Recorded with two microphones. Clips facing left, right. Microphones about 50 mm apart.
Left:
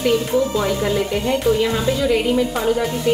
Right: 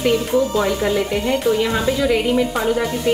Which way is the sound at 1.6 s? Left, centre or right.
Centre.